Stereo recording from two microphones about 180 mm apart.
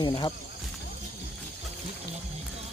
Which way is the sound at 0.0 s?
25° left (ahead or behind).